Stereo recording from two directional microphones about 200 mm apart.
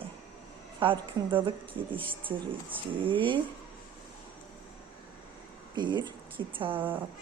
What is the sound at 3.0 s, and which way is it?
Speech, 25° right (ahead or behind).